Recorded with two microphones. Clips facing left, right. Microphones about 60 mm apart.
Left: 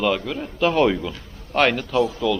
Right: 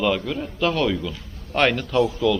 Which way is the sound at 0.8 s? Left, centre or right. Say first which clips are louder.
Left 4 dB; centre.